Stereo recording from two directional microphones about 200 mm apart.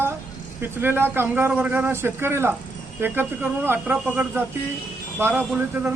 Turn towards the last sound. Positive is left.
turn(degrees=-10)  # may be behind; listen again after turning